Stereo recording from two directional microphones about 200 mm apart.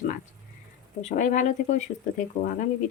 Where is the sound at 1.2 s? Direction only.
40° left (ahead or behind).